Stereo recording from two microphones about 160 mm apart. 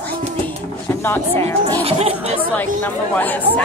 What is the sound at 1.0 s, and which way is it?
Speech, 15° left (ahead or behind).